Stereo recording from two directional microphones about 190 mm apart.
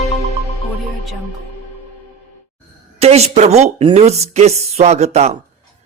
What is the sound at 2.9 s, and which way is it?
Speech, 35° right (ahead or behind).